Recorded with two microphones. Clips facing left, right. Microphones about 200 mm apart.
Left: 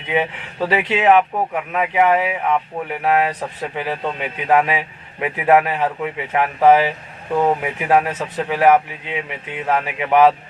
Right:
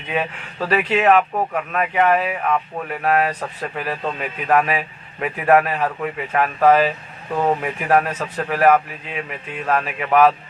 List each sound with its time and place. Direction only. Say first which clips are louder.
0.1 s a man's voice: left 3 dB; 20° left (ahead or behind)